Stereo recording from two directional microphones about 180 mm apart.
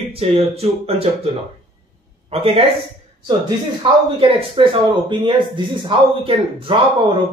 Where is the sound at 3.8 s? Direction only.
30° right (ahead or behind).